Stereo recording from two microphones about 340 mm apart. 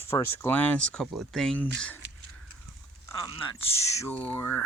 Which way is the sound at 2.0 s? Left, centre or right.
Right.